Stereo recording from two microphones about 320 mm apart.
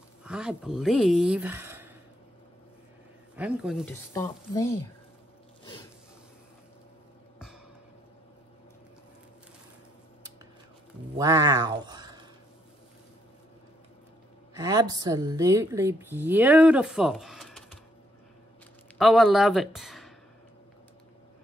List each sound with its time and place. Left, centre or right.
0.2 s speech: centre
3.3 s speech: centre
11.1 s a woman's voice: centre
14.6 s a woman's voice: centre
18.9 s speech: centre